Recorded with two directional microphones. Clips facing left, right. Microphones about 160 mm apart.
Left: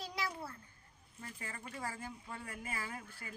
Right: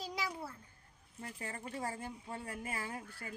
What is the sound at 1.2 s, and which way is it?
Speech, 30° right (ahead or behind).